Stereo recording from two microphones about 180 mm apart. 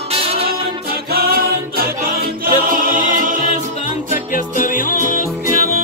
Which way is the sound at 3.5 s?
40° left (ahead or behind).